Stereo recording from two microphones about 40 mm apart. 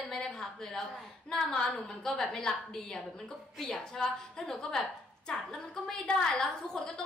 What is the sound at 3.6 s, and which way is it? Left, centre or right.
A woman's voice, centre.